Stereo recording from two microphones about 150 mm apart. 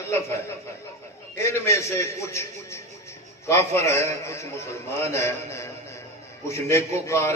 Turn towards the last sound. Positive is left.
turn(degrees=20)  # may be behind; listen again after turning